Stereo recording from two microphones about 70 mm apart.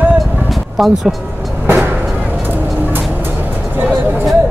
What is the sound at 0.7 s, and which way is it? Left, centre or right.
Speech, centre.